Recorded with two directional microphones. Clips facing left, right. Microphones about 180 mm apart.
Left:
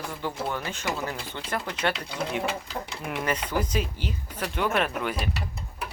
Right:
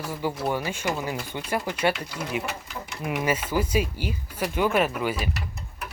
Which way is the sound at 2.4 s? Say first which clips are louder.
Left 4 dB; 30° left (ahead or behind).